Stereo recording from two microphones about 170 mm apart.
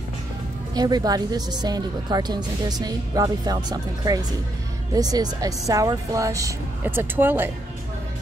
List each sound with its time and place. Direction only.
0.7 s speech: 25° right (ahead or behind)